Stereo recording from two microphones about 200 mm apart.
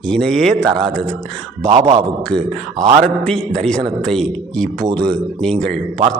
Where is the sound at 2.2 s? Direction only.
5° left (ahead or behind).